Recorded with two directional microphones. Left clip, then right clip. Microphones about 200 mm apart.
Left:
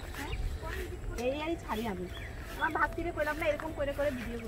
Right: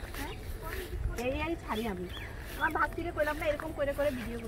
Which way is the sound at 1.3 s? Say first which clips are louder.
Right 1 dB; 5° right (ahead or behind).